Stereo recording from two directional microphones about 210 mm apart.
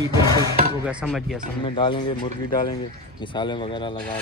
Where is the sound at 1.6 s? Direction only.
25° left (ahead or behind).